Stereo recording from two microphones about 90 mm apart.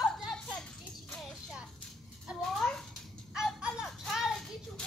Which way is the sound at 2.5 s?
5° left (ahead or behind).